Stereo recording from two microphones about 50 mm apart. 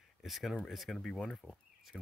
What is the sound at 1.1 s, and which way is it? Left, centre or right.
Speech, centre.